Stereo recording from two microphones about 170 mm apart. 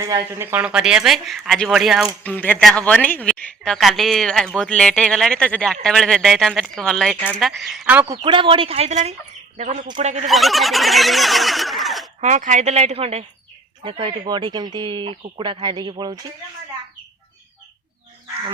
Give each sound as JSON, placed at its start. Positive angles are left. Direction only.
{"t": 0.0, "sound": "a woman's voice", "side_deg": -20}
{"t": 2.2, "sound": "a woman's voice", "side_deg": 10}
{"t": 8.0, "sound": "speech", "side_deg": -35}
{"t": 10.2, "sound": "a sound", "side_deg": 0}
{"t": 12.2, "sound": "speech", "side_deg": -45}